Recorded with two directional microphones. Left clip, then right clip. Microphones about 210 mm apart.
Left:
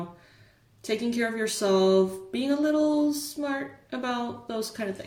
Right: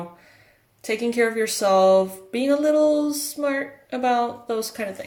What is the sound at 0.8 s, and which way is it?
Speech, 30° right (ahead or behind).